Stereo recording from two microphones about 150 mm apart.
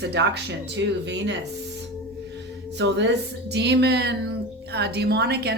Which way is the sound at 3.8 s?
90° right.